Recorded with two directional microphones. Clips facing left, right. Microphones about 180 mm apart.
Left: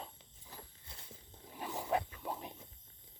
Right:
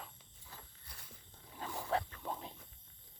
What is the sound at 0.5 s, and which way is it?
Walk, 25° left (ahead or behind).